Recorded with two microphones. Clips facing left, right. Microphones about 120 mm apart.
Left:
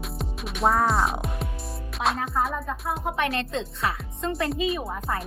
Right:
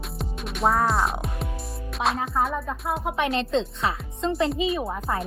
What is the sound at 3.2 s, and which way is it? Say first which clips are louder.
Speech: right 6 dB; 25° right (ahead or behind).